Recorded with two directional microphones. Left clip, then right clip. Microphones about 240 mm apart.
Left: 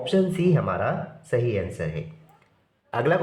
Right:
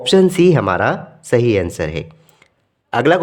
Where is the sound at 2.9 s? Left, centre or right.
Right.